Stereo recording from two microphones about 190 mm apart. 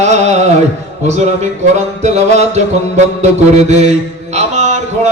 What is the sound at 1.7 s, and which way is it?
Music, 35° right (ahead or behind).